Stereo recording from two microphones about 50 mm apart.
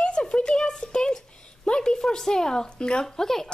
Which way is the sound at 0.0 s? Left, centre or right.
Centre.